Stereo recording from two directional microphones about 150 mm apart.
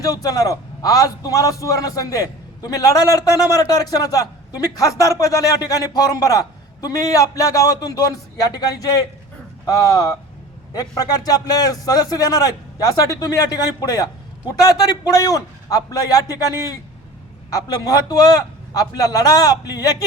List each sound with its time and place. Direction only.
0.0 s a man's voice: 25° left (ahead or behind)